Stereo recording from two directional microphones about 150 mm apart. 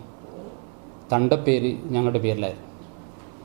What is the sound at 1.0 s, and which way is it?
A man's voice, 15° right (ahead or behind).